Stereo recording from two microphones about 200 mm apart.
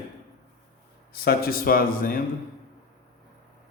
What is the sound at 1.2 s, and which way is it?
Speech, 50° left (ahead or behind).